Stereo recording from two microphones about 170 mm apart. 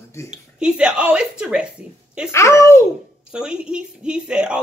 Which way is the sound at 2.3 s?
15° left (ahead or behind).